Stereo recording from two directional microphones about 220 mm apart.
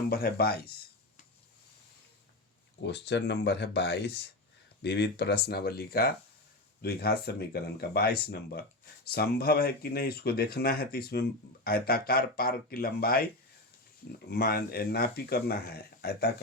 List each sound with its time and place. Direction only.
0.1 s speech: 45° left (ahead or behind)
2.8 s speech: 50° left (ahead or behind)
14.3 s speech: 45° left (ahead or behind)